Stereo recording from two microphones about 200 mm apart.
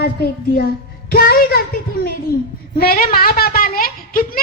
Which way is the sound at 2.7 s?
50° left (ahead or behind).